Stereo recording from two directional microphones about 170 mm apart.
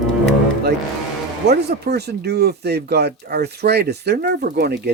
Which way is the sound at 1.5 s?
70° right (ahead or behind).